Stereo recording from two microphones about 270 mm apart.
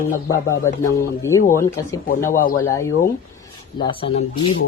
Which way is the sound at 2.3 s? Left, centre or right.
Left.